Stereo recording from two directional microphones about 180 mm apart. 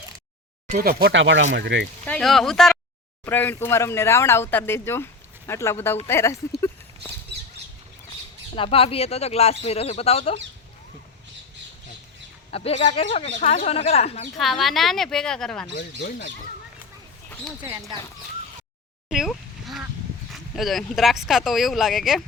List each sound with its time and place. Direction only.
0.8 s speech: 60° right (ahead or behind); by 1.5 s 90° right
1.5 s speech: 75° right (ahead or behind)
2.0 s speech: 5° left (ahead or behind)
8.5 s speech: 30° left (ahead or behind)
12.5 s speech: 35° left (ahead or behind)
14.3 s speech: centre (ahead or behind)
16.0 s speech: 50° left (ahead or behind)
17.6 s speech: 15° right (ahead or behind)
19.0 s a sound: centre (ahead or behind)
20.3 s speech: centre (ahead or behind)